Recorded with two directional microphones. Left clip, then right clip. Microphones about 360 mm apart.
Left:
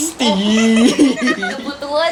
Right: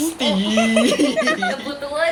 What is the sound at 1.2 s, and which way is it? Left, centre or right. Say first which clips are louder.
Speech: even; centre.